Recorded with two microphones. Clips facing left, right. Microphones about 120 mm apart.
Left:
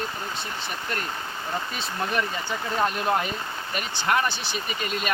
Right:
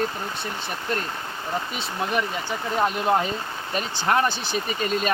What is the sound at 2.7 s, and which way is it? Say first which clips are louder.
Speech: right 3 dB; 20° right (ahead or behind).